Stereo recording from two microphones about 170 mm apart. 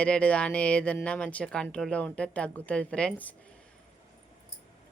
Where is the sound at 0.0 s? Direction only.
5° left (ahead or behind).